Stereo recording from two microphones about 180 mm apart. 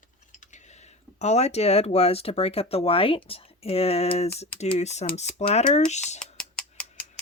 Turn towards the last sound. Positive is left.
turn(degrees=5)  # may be behind; listen again after turning